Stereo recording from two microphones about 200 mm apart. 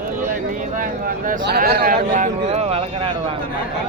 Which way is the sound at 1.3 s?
50° right (ahead or behind).